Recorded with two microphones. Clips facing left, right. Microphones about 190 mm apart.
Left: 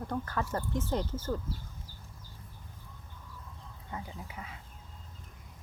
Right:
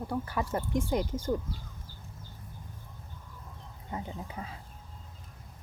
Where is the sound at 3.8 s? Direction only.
25° right (ahead or behind).